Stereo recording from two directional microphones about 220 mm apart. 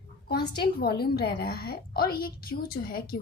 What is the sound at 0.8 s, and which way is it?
A woman's voice, 45° left (ahead or behind).